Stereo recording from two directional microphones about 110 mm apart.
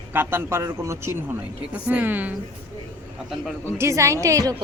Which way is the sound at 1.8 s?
15° right (ahead or behind).